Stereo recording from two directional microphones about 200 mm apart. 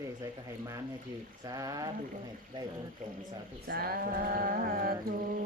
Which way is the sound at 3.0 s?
35° right (ahead or behind).